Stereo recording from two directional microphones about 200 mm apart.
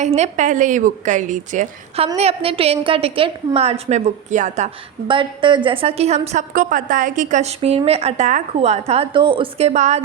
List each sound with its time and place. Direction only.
0.0 s a woman's voice: 35° right (ahead or behind)